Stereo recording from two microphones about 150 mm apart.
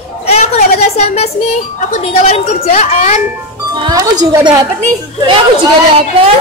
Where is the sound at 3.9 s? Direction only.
25° right (ahead or behind).